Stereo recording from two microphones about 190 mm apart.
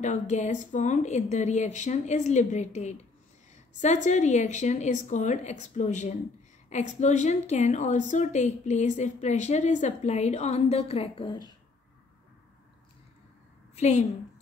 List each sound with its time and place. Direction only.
0.0 s a woman's voice: 40° left (ahead or behind); by 11.5 s 25° left (ahead or behind)
13.7 s a woman's voice: 35° left (ahead or behind)